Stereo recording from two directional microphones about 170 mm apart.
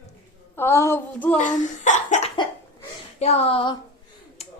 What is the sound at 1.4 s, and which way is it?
A child's voice, 45° left (ahead or behind).